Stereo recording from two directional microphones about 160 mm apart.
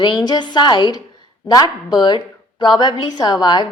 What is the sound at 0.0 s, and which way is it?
A woman's voice, 30° left (ahead or behind).